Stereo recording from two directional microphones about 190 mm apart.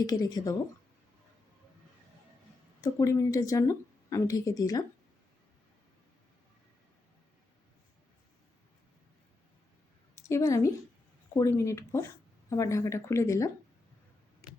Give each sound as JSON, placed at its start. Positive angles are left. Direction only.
{"t": 0.0, "sound": "speech", "side_deg": 20}
{"t": 2.8, "sound": "speech", "side_deg": 15}
{"t": 10.2, "sound": "a woman's voice", "side_deg": 15}